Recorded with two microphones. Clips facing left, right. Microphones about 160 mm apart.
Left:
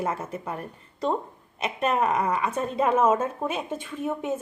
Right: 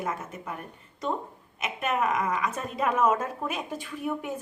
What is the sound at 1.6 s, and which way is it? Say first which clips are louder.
A woman's voice: left 3 dB; 35° left (ahead or behind).